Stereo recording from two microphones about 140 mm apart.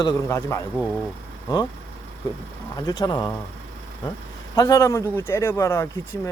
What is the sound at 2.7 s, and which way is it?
Speech, 30° left (ahead or behind).